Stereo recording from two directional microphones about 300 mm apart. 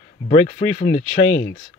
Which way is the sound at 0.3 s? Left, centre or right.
Left.